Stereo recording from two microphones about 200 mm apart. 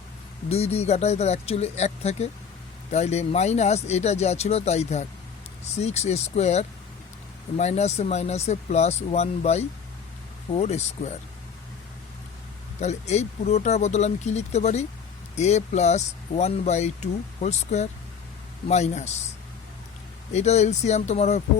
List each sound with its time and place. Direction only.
0.4 s speech: 30° left (ahead or behind)
12.8 s speech: 35° left (ahead or behind)
20.3 s speech: 35° left (ahead or behind)